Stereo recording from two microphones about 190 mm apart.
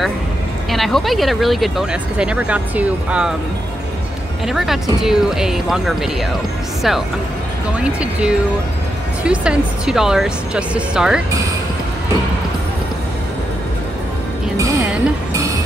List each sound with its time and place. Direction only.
0.7 s speech: centre (ahead or behind)
4.5 s speech: centre (ahead or behind)
7.8 s speech: 5° right (ahead or behind)